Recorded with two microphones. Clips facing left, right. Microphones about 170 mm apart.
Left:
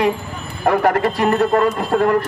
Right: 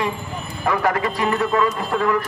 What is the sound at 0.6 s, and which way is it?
A man's voice, 50° left (ahead or behind).